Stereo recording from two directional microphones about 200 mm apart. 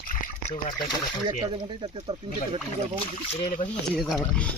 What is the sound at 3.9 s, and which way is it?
Speech, centre (ahead or behind).